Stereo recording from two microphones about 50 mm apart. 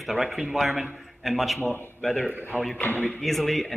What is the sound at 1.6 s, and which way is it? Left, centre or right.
Speech, left.